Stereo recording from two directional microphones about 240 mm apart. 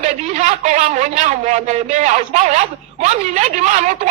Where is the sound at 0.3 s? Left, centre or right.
Right.